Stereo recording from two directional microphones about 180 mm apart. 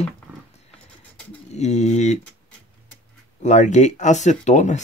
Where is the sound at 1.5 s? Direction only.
40° left (ahead or behind).